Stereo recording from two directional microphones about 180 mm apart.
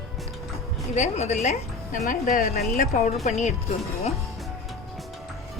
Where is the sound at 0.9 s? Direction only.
40° left (ahead or behind).